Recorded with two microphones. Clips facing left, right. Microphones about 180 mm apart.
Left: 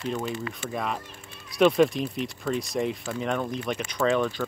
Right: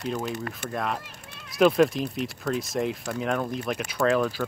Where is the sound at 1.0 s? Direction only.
75° right (ahead or behind).